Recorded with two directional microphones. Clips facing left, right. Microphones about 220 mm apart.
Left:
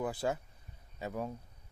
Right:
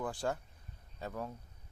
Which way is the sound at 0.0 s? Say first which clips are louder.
Left 2 dB; 5° left (ahead or behind).